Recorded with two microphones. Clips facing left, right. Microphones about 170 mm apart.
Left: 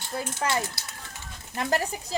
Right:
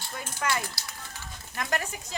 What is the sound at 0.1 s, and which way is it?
Speech, 30° left (ahead or behind).